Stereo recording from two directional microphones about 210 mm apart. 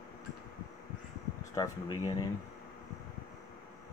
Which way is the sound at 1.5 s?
15° left (ahead or behind).